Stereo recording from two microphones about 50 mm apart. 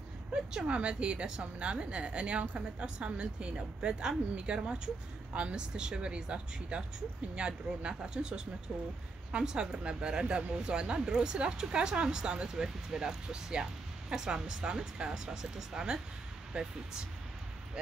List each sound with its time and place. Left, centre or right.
0.7 s a woman's voice: right